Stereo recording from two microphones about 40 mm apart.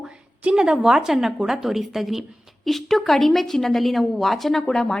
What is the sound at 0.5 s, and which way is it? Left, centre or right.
A woman's voice, centre.